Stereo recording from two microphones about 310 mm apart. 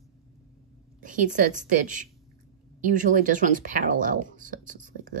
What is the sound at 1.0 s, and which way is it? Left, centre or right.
Speech, right.